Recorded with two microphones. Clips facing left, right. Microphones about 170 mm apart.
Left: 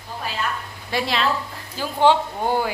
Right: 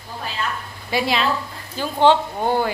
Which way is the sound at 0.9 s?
5° right (ahead or behind).